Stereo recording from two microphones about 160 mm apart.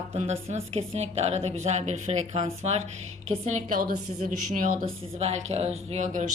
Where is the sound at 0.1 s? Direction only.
40° right (ahead or behind).